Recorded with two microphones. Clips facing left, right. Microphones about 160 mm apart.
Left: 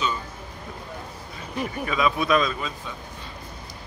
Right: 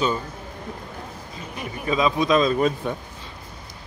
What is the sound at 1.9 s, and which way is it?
Speech, 25° right (ahead or behind).